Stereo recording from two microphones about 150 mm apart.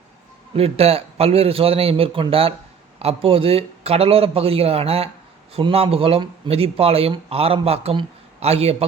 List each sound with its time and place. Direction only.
0.5 s speech: 40° right (ahead or behind)